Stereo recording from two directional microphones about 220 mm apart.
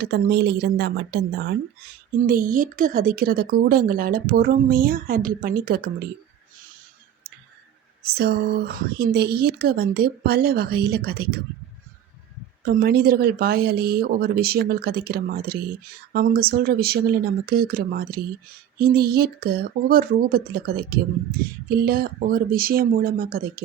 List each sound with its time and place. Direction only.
0.0 s a woman's voice: 50° right (ahead or behind)
8.0 s speech: 45° right (ahead or behind)
12.6 s speech: 45° right (ahead or behind)